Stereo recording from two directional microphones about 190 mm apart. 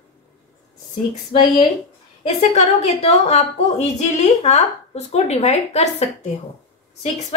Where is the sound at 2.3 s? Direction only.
35° left (ahead or behind).